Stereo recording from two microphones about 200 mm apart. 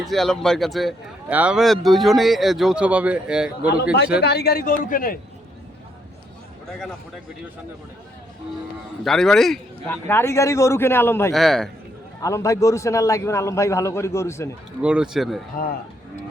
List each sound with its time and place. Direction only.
0.0 s speech: centre (ahead or behind)
4.2 s a man's voice: 55° left (ahead or behind)
6.7 s speech: centre (ahead or behind)
9.0 s a man's voice: centre (ahead or behind)
11.3 s speech: centre (ahead or behind)
12.2 s a man's voice: 15° left (ahead or behind)
14.8 s speech: 5° right (ahead or behind)